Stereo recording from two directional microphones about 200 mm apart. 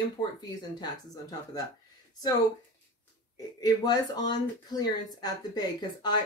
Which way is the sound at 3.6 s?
20° left (ahead or behind).